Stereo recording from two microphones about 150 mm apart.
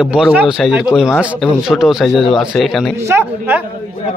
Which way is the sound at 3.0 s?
15° right (ahead or behind).